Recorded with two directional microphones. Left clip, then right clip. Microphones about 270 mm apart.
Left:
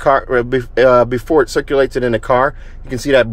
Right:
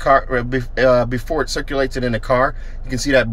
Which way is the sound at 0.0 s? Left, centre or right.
Centre.